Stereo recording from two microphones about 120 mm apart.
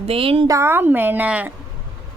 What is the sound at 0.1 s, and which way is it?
Speech, 50° right (ahead or behind).